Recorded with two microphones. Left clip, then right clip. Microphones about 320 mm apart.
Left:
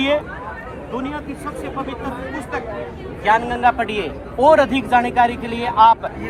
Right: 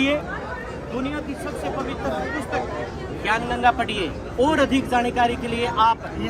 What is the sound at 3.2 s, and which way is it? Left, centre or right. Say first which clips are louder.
Speech: left 5 dB; left.